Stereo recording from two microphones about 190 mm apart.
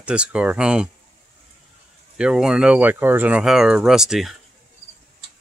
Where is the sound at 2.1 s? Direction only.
5° right (ahead or behind).